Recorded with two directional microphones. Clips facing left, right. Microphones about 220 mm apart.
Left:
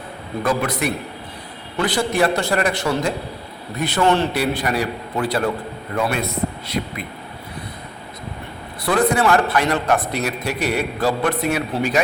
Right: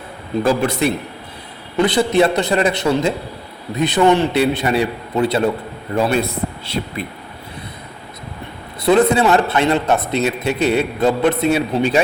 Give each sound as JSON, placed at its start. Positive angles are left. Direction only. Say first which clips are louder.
{"t": 0.4, "sound": "a man's voice", "louder": "right 4 dB", "side_deg": -30}
{"t": 8.8, "sound": "speech", "louder": "right 5 dB", "side_deg": -20}